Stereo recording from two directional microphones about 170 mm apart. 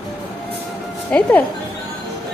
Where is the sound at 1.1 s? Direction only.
10° left (ahead or behind).